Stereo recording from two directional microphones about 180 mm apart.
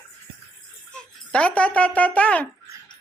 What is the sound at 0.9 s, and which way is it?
Speech, 5° left (ahead or behind).